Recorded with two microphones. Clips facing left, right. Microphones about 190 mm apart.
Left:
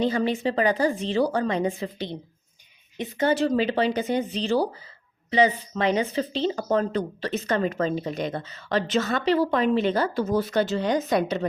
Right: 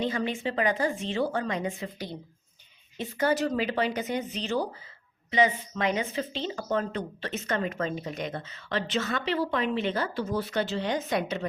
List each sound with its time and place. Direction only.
0.3 s speech: 35° left (ahead or behind)